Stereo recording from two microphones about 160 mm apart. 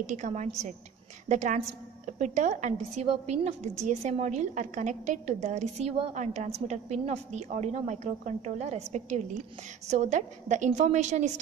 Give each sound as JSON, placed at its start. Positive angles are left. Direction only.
{"t": 0.0, "sound": "a woman's voice", "side_deg": -50}